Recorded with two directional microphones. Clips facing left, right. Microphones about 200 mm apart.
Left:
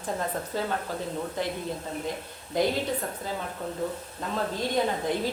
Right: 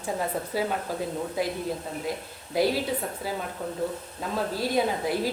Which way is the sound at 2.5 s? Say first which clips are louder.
Right 1 dB; 5° right (ahead or behind).